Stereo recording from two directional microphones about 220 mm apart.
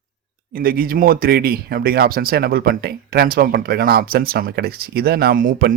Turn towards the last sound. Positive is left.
turn(degrees=-40)  # may be behind; listen again after turning